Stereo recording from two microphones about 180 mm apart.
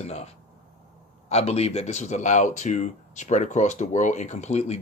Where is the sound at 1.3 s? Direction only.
35° left (ahead or behind).